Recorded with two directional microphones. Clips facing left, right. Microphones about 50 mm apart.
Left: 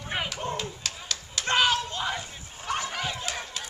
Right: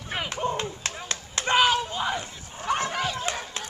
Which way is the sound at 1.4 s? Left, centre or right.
Centre.